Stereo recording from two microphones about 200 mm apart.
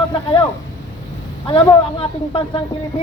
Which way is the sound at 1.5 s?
25° left (ahead or behind).